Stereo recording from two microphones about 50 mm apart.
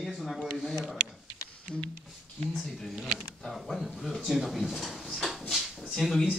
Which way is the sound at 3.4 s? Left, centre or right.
Centre.